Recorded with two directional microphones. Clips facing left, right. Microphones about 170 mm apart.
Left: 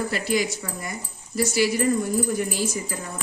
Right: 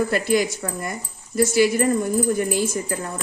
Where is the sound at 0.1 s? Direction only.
55° right (ahead or behind).